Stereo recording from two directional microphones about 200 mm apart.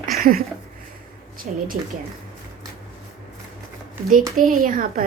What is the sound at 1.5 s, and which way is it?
Speech, 40° right (ahead or behind).